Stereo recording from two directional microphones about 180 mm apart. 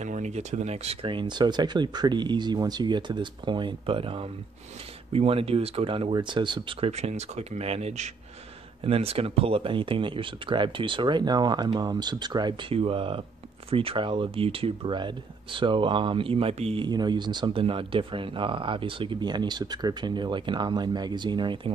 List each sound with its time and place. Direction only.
0.0 s speech: 40° right (ahead or behind); by 21.5 s 25° right (ahead or behind)